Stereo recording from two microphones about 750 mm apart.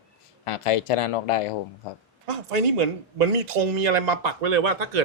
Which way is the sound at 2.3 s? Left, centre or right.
Right.